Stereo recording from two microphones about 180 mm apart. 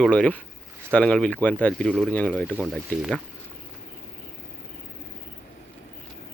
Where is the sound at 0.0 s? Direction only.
5° left (ahead or behind).